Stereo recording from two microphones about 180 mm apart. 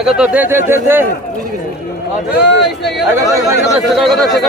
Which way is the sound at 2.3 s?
70° left (ahead or behind).